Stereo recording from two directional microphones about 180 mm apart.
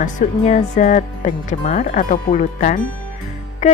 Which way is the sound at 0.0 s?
45° left (ahead or behind).